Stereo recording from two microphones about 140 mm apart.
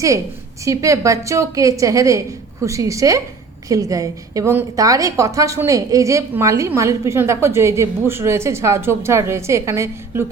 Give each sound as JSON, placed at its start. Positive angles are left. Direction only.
{"t": 0.6, "sound": "a woman's voice", "side_deg": -25}